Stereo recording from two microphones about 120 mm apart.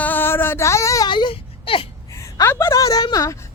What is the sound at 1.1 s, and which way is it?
Speech, 40° left (ahead or behind).